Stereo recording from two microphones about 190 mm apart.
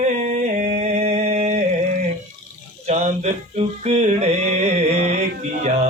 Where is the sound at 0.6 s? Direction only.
35° right (ahead or behind).